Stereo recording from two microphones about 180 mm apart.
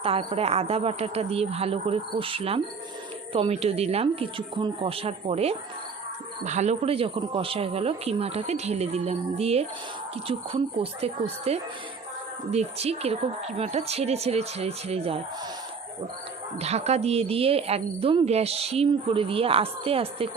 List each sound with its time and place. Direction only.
0.0 s a woman's voice: 35° right (ahead or behind)
16.6 s a woman's voice: 35° right (ahead or behind)